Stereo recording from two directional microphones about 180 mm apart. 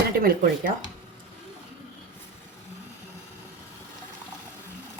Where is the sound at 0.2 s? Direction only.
50° right (ahead or behind).